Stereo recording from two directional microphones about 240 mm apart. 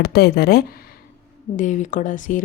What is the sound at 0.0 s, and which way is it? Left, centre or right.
Speech, left.